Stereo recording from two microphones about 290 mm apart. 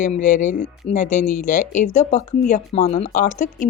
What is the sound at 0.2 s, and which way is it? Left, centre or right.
A woman's voice, left.